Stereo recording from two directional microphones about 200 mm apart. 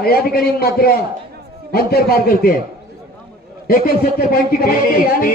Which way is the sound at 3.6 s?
50° left (ahead or behind).